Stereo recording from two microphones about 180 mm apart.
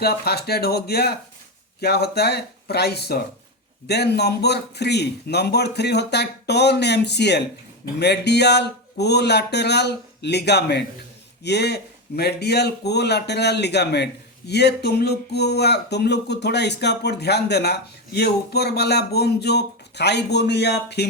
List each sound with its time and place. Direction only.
0.0 s speech: 60° left (ahead or behind)